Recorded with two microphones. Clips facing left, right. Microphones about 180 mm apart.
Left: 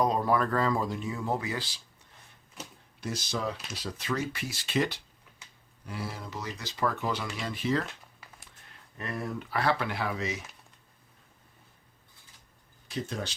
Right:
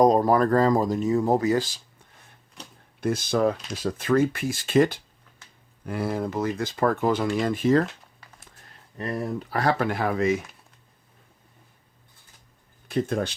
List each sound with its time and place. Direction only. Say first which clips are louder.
0.0 s speech: right 8 dB; 40° right (ahead or behind)
2.6 s a sound: left 1 dB; centre (ahead or behind)
3.0 s speech: right 11 dB; 55° right (ahead or behind)
9.0 s speech: right 6 dB; 35° right (ahead or behind); by 10.4 s 50° right (ahead or behind)
12.9 s speech: right 10 dB; 55° right (ahead or behind)